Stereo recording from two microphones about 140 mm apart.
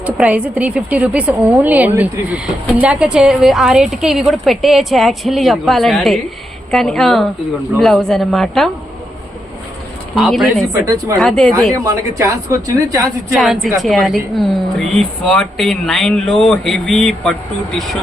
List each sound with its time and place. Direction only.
0.0 s a woman's voice: 10° right (ahead or behind)
10.2 s speech: centre (ahead or behind)
10.7 s a woman's voice: 25° right (ahead or behind)
11.2 s speech: 5° left (ahead or behind)
11.7 s a woman's voice: 25° right (ahead or behind)
13.3 s speech: centre (ahead or behind)